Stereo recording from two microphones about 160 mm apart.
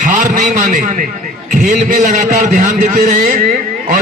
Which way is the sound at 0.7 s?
55° right (ahead or behind).